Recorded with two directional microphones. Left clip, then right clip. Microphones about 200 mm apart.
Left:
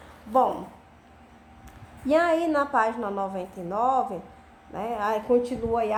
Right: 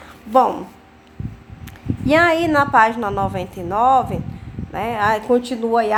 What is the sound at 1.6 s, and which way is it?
A woman's voice, 25° right (ahead or behind).